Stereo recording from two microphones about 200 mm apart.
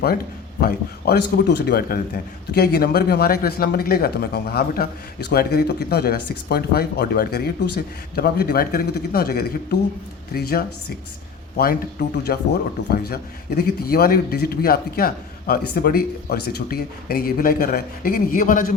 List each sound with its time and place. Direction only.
0.6 s a man's voice: 50° left (ahead or behind)
11.5 s a man's voice: 50° left (ahead or behind)